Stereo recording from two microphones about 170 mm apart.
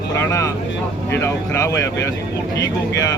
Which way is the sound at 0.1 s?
20° left (ahead or behind).